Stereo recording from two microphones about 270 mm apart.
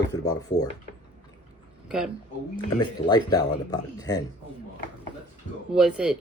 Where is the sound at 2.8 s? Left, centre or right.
Centre.